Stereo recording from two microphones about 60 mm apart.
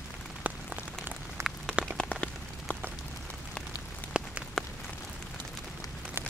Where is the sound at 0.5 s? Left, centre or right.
Right.